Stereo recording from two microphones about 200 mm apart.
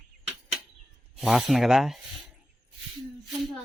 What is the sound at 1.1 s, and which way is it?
Speech, centre (ahead or behind).